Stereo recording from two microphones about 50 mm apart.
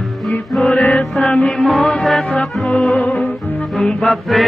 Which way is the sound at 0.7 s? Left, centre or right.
Left.